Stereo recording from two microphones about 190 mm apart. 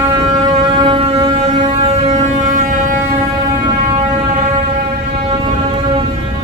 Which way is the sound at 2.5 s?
45° right (ahead or behind).